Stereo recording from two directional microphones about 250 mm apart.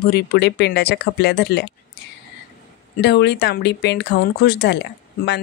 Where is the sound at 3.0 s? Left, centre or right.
Left.